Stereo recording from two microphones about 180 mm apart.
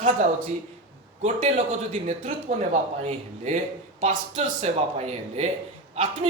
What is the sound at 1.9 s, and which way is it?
A woman's voice, 45° right (ahead or behind).